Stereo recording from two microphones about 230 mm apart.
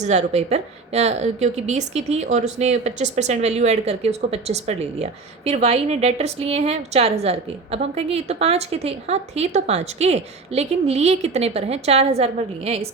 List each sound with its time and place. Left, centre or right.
0.0 s a woman's voice: right